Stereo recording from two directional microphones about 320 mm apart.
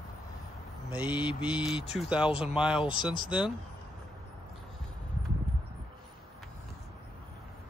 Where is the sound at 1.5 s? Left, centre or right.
Centre.